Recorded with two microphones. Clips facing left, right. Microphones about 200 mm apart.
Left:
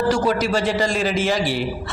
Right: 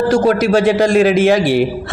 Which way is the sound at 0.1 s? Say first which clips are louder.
Right 7 dB; 55° right (ahead or behind).